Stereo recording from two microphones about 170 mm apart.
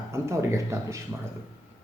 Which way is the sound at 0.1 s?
15° right (ahead or behind).